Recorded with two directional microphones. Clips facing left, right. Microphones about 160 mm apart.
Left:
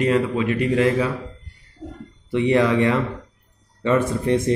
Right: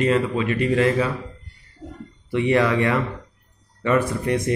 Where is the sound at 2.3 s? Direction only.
20° left (ahead or behind).